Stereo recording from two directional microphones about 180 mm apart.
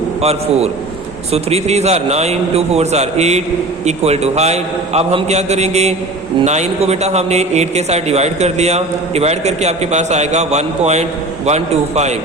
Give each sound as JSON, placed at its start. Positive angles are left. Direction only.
{"t": 0.2, "sound": "a man's voice", "side_deg": -35}